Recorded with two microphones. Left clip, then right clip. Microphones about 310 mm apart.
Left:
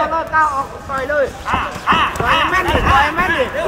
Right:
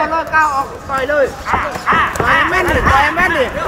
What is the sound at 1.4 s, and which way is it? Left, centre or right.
Speech, left.